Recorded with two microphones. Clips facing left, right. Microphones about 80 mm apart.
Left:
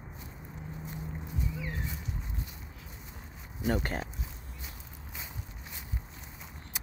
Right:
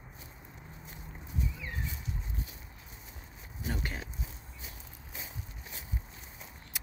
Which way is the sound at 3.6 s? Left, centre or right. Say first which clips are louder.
Left 7 dB; left.